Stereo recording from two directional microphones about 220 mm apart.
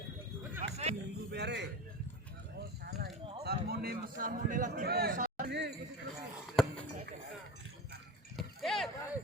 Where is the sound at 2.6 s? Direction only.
45° right (ahead or behind).